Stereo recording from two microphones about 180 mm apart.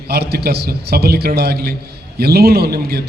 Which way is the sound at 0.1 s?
60° right (ahead or behind).